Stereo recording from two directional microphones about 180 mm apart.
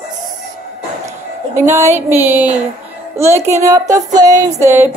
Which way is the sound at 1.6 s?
15° right (ahead or behind).